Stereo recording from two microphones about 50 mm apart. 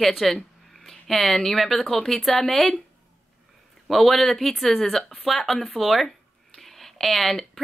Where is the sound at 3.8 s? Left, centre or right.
Centre.